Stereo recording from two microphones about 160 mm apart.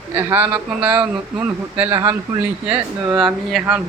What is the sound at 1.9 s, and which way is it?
Speech, 20° right (ahead or behind).